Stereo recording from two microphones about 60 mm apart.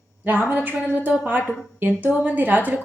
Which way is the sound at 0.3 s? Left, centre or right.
Right.